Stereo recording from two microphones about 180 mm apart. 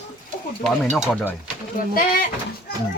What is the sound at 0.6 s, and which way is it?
Speech, 5° left (ahead or behind).